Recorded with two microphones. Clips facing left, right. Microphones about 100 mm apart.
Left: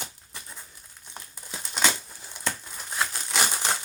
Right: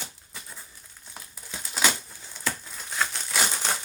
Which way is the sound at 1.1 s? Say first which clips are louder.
Left 1 dB; centre (ahead or behind).